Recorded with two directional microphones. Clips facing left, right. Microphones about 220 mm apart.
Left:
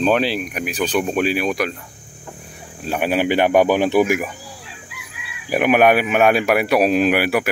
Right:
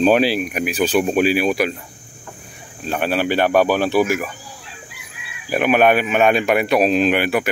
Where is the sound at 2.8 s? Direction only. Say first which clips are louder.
Left 1 dB; 10° left (ahead or behind).